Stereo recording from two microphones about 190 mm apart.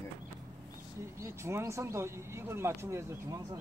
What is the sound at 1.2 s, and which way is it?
Speech, 15° right (ahead or behind).